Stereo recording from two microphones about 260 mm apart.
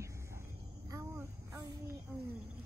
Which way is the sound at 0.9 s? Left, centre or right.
Centre.